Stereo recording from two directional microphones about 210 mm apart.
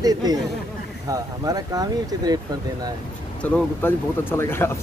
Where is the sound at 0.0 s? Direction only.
20° right (ahead or behind).